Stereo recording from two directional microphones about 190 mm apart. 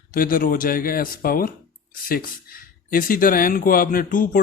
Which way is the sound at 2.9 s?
45° left (ahead or behind).